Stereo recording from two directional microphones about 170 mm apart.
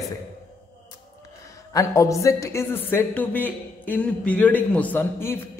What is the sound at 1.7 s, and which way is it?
Speech, 20° left (ahead or behind).